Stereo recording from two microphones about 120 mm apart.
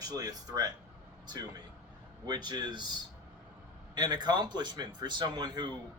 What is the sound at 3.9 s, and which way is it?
A man's voice, 35° right (ahead or behind).